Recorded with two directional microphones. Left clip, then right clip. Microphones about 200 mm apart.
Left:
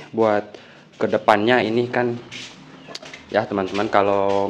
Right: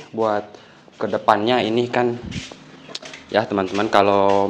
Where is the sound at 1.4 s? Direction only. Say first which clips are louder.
Left 1 dB; centre (ahead or behind).